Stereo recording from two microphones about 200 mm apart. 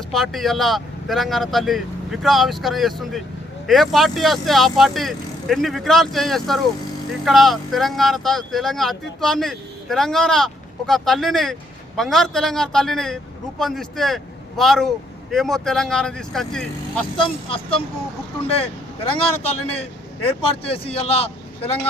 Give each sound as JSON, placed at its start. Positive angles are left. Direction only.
{"t": 0.1, "sound": "speech", "side_deg": 0}
{"t": 17.2, "sound": "a man's voice", "side_deg": 25}